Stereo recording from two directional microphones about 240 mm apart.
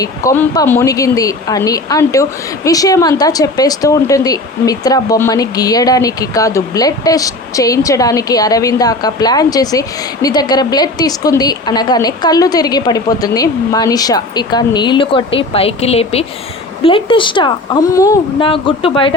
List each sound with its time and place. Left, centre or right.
0.0 s speech: centre